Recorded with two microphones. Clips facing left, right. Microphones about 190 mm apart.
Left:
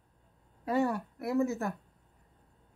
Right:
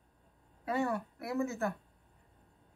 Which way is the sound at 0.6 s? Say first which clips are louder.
Left 4 dB; 40° left (ahead or behind).